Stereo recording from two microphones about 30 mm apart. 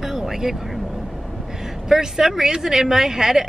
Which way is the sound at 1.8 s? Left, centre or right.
Centre.